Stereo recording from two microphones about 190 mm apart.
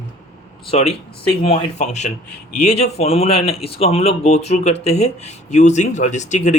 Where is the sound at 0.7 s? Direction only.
35° left (ahead or behind).